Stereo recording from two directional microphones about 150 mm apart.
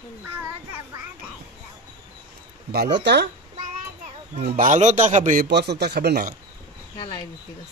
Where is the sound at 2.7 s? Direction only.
90° right.